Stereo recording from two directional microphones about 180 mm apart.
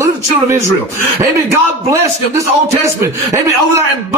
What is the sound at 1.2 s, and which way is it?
A man's voice, 15° right (ahead or behind).